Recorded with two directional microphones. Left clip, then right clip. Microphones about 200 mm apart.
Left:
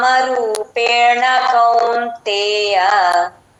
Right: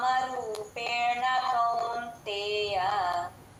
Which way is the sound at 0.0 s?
50° left (ahead or behind).